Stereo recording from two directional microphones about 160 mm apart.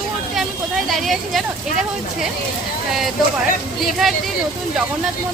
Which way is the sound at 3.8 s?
Centre (ahead or behind).